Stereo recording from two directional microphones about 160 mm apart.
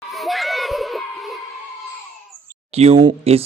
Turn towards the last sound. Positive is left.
turn(degrees=-35)  # may be behind; listen again after turning